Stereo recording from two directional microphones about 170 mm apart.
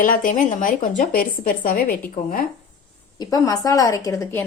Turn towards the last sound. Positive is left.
turn(degrees=20)  # may be behind; listen again after turning